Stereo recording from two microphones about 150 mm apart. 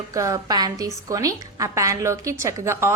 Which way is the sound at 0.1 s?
20° right (ahead or behind).